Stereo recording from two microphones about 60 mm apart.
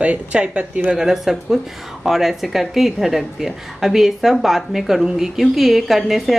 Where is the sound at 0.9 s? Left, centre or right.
Centre.